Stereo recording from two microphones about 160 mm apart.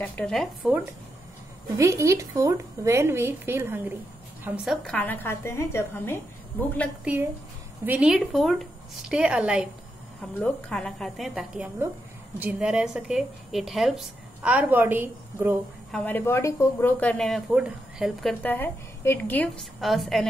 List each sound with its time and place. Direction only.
0.0 s speech: 5° left (ahead or behind)
1.8 s a woman's voice: 20° right (ahead or behind)
4.8 s speech: 10° left (ahead or behind)
7.8 s a woman's voice: 10° right (ahead or behind)
15.9 s speech: 10° left (ahead or behind)
18.4 s speech: 10° left (ahead or behind)